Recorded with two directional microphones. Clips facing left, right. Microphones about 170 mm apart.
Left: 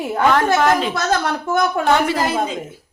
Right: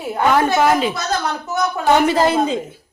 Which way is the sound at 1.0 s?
55° left (ahead or behind).